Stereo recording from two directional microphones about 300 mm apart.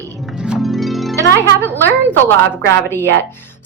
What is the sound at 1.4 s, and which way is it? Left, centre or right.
Speech, centre.